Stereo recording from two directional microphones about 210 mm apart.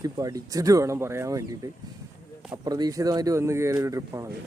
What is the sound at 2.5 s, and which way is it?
Speech, 20° right (ahead or behind).